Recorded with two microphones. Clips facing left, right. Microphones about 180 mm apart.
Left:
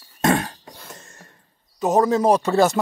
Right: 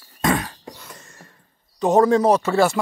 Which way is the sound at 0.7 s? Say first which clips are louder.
Left 1 dB; 50° left (ahead or behind).